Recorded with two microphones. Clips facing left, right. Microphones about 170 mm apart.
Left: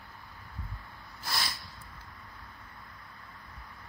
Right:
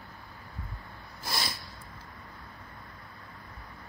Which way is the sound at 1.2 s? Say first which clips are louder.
Right 1 dB; 20° right (ahead or behind).